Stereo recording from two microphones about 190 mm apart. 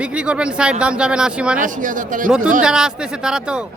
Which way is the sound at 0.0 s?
5° right (ahead or behind).